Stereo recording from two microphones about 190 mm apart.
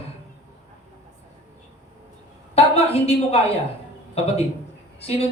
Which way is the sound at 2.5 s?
35° left (ahead or behind).